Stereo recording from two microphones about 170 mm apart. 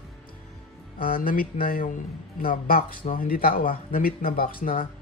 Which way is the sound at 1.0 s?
60° left (ahead or behind).